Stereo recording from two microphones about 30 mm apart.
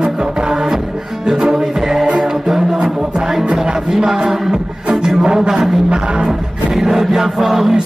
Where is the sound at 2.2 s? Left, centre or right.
Centre.